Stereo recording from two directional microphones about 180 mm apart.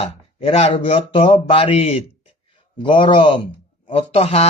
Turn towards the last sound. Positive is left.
turn(degrees=35)  # may be behind; listen again after turning